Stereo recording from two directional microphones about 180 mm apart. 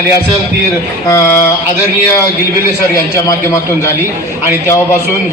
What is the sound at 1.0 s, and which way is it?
Speech, 15° left (ahead or behind).